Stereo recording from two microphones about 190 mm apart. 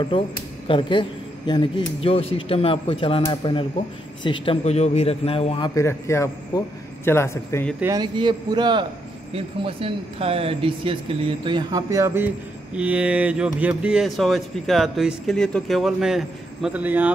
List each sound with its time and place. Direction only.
0.1 s a man's voice: 25° left (ahead or behind)
5.8 s a man's voice: 15° left (ahead or behind)
7.8 s speech: 20° right (ahead or behind)